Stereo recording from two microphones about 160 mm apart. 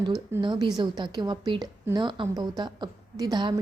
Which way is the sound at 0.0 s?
30° right (ahead or behind).